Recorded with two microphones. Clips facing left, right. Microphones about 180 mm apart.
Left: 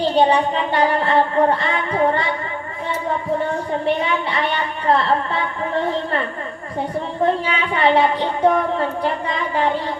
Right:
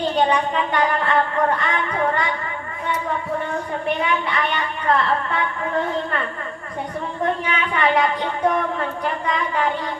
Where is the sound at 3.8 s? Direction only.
30° left (ahead or behind).